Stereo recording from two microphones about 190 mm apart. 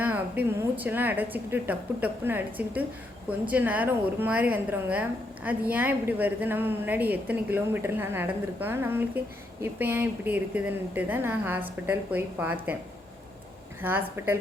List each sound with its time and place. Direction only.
0.0 s a woman's voice: 10° right (ahead or behind)
13.8 s a woman's voice: 10° right (ahead or behind)